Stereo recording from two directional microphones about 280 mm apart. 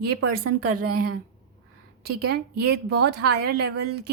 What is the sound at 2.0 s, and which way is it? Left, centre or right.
Speech, right.